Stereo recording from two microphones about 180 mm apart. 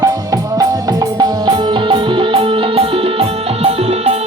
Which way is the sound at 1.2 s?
25° right (ahead or behind).